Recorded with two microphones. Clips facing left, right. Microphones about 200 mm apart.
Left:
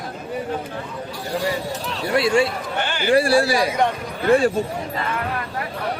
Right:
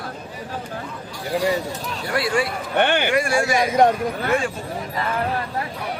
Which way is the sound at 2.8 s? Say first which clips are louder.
Right 9 dB; 60° right (ahead or behind).